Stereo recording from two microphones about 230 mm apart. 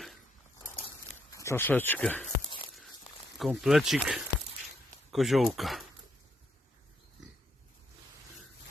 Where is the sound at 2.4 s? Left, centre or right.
Left.